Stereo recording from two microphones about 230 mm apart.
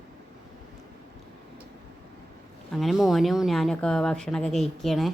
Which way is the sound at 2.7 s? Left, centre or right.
Centre.